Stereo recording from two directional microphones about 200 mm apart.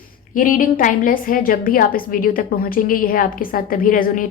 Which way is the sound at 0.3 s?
40° left (ahead or behind).